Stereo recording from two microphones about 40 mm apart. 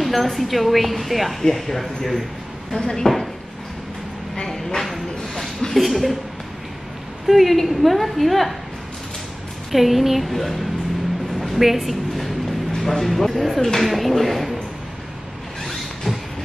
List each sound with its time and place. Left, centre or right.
0.0 s a woman's voice: centre
3.1 s speech: centre
4.5 s a sound: centre
7.2 s a woman's voice: centre
9.7 s a woman's voice: centre
11.3 s a sound: centre
13.6 s speech: centre
13.8 s a woman's voice: centre
15.6 s a sound: centre